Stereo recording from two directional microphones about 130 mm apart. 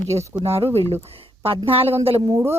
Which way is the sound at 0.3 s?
50° right (ahead or behind).